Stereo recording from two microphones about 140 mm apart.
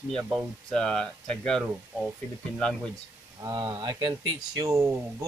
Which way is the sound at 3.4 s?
30° right (ahead or behind).